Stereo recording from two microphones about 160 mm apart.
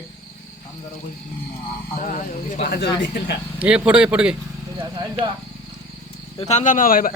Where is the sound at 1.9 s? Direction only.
55° left (ahead or behind); by 2.9 s 80° left.